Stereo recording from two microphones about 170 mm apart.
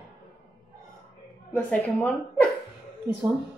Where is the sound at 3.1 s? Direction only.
15° right (ahead or behind).